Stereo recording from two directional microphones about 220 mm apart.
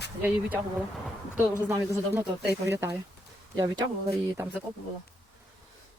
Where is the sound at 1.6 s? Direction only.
10° right (ahead or behind).